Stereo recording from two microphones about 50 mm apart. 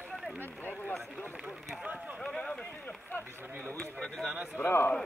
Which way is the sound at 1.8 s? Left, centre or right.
Right.